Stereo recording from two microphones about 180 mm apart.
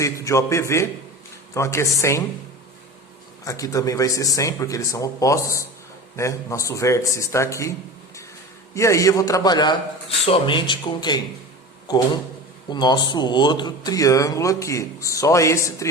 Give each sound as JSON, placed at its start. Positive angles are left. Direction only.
{"t": 0.0, "sound": "speech", "side_deg": 15}
{"t": 3.4, "sound": "speech", "side_deg": 20}
{"t": 8.7, "sound": "a man's voice", "side_deg": 15}
{"t": 12.7, "sound": "a man's voice", "side_deg": 25}